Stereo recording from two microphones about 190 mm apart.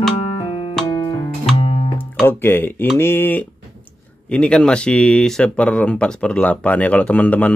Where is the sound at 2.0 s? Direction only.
10° left (ahead or behind).